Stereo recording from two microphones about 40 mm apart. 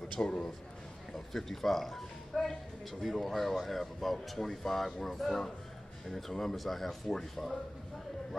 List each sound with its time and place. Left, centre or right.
0.1 s a man's voice: left
1.1 s speech: centre